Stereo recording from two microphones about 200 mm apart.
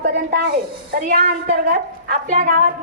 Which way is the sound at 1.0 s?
40° right (ahead or behind).